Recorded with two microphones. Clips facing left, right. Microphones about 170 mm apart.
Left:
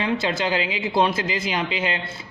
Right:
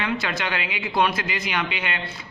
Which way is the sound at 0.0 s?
25° left (ahead or behind).